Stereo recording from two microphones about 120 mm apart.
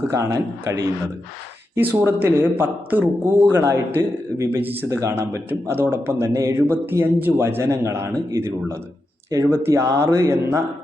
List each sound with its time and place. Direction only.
0.1 s speech: 25° right (ahead or behind)
4.9 s speech: 25° right (ahead or behind)